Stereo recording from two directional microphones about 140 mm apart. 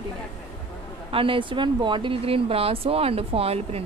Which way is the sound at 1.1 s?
40° right (ahead or behind).